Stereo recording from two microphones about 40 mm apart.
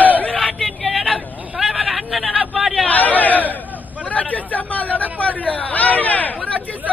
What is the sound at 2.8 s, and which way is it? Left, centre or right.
Chatter, left.